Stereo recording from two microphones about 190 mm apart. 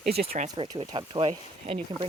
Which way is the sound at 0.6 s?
25° right (ahead or behind).